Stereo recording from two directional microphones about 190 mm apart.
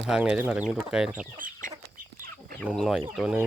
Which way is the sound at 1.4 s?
45° right (ahead or behind).